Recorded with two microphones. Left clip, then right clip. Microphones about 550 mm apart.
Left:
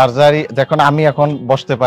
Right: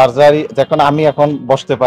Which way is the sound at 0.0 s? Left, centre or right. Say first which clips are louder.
Right 2 dB; left.